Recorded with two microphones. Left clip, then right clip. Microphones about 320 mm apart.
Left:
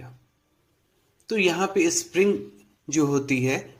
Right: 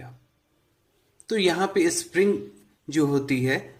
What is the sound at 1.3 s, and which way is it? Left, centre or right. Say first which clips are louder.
Speech: even; centre.